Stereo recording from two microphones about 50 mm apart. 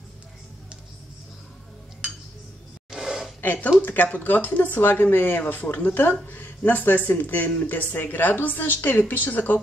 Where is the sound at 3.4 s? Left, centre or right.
Left.